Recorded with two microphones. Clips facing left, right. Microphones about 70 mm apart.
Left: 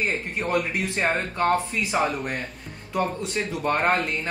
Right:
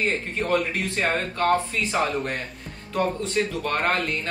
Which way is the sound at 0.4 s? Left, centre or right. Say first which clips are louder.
Right 1 dB; centre.